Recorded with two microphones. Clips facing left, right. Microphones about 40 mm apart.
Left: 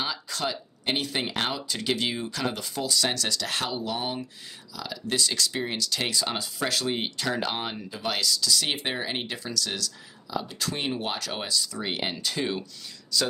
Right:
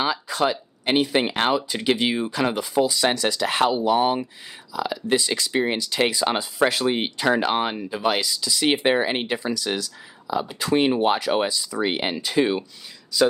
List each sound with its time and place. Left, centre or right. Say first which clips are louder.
0.0 s speech: right 8 dB; right